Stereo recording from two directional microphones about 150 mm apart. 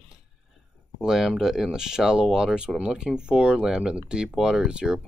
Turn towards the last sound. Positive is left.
turn(degrees=-5)  # may be behind; listen again after turning